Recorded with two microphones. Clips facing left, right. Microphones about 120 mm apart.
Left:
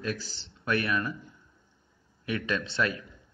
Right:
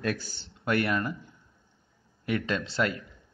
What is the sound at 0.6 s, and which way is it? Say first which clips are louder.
Speech: right 2 dB; 30° right (ahead or behind).